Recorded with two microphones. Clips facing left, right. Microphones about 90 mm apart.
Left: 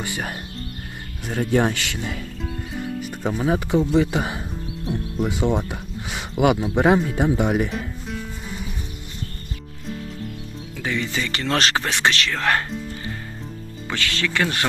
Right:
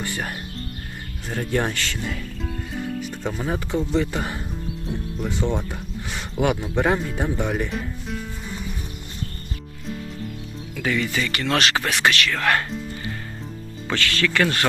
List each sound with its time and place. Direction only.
0.0 s speech: 15° left (ahead or behind)
2.0 s speech: centre (ahead or behind)
2.7 s music: 5° left (ahead or behind)
3.8 s speech: 15° left (ahead or behind)
7.7 s music: centre (ahead or behind)
10.8 s speech: 25° left (ahead or behind)
13.9 s speech: 20° left (ahead or behind)